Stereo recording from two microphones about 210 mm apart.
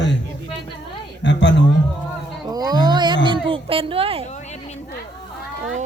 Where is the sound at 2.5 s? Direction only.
20° right (ahead or behind).